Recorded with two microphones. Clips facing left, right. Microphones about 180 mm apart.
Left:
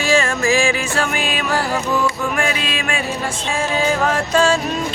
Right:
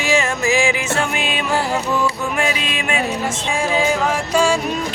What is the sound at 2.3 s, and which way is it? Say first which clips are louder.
Mantra: even; 20° right (ahead or behind).